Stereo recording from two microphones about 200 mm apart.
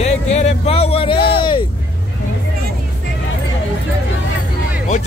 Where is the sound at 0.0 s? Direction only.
30° left (ahead or behind).